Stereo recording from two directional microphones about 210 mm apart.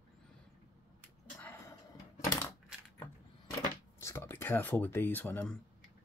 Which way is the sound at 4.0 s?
10° left (ahead or behind).